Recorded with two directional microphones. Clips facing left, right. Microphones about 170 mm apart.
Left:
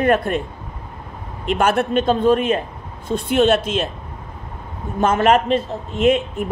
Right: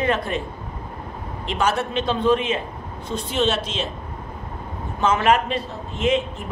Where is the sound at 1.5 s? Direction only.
55° left (ahead or behind).